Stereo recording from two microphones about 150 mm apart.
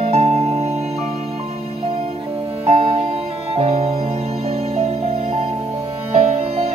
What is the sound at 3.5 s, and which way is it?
Music, 45° right (ahead or behind).